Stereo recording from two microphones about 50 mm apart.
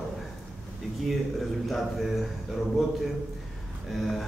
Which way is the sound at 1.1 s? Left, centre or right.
Centre.